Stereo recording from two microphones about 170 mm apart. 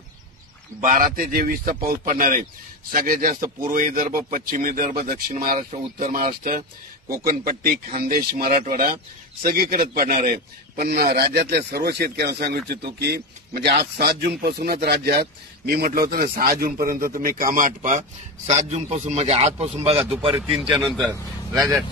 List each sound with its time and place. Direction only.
0.8 s a man's voice: 50° right (ahead or behind)
20.7 s a man's voice: centre (ahead or behind)